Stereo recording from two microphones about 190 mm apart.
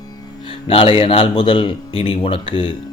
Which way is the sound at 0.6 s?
30° left (ahead or behind).